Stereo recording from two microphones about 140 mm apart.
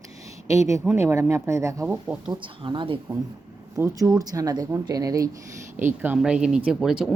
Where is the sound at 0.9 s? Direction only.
20° right (ahead or behind).